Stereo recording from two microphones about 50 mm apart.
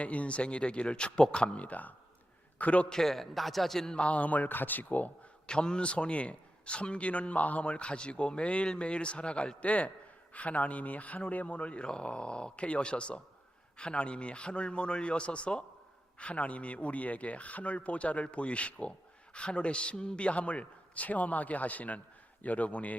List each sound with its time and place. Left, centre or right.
0.0 s a man's voice: left
2.9 s a man's voice: centre
3.9 s speech: left
5.5 s speech: centre